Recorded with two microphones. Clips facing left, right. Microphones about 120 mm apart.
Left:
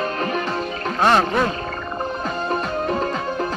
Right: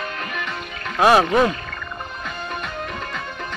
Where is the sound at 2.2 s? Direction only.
35° left (ahead or behind).